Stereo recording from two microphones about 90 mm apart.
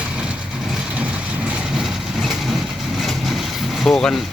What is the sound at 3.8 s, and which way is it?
Speech, 5° left (ahead or behind).